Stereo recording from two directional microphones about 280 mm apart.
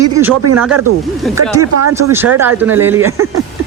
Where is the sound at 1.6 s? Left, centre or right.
Right.